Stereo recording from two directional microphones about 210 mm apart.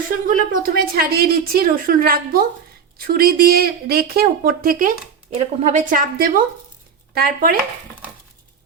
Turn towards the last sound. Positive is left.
turn(degrees=-45)  # may be behind; listen again after turning